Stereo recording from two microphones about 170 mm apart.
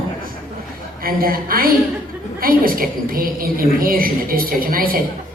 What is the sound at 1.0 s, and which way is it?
A woman's voice, 60° right (ahead or behind).